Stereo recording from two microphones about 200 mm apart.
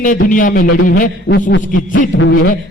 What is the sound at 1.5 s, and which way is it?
Speech, 70° left (ahead or behind).